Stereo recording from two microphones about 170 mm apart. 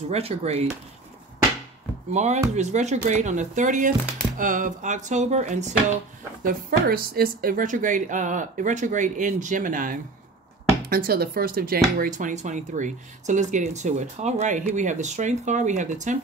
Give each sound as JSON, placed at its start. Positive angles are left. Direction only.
{"t": 0.1, "sound": "speech", "side_deg": -35}
{"t": 2.1, "sound": "speech", "side_deg": -40}
{"t": 6.4, "sound": "speech", "side_deg": -60}
{"t": 12.0, "sound": "speech", "side_deg": -50}